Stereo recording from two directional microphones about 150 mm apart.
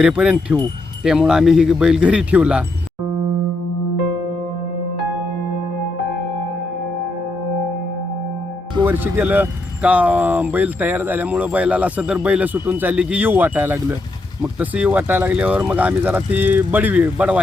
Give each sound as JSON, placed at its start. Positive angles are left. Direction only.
{"t": 0.0, "sound": "speech", "side_deg": -5}
{"t": 8.8, "sound": "speech", "side_deg": -15}